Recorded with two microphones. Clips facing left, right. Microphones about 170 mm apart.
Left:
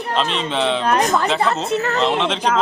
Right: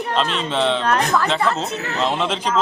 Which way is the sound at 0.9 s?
20° left (ahead or behind).